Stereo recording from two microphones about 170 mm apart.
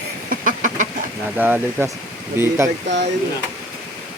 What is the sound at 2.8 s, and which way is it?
Speech, 90° right.